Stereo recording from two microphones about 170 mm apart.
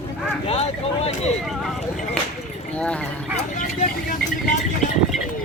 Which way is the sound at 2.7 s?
5° left (ahead or behind).